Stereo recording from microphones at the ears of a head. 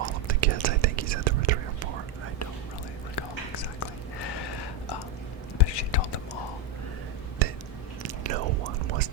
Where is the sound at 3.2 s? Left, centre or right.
Left.